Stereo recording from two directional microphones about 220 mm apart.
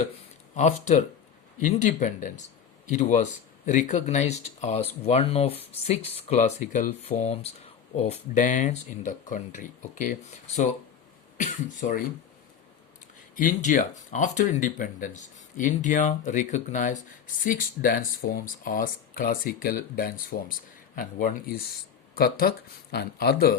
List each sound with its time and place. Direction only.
0.5 s speech: 30° left (ahead or behind)
13.3 s speech: 35° left (ahead or behind)